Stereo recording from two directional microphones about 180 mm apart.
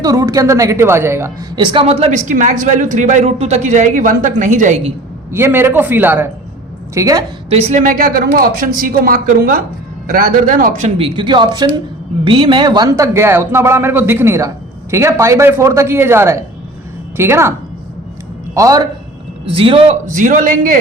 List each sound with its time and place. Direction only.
0.0 s a woman's voice: 20° right (ahead or behind); by 4.9 s 40° right (ahead or behind)
5.3 s a man's voice: 10° right (ahead or behind)
7.5 s a woman's voice: 40° right (ahead or behind); by 17.5 s 15° right (ahead or behind)
18.5 s a woman's voice: 20° right (ahead or behind)
19.5 s a woman's voice: 30° right (ahead or behind)
20.1 s speech: 45° right (ahead or behind)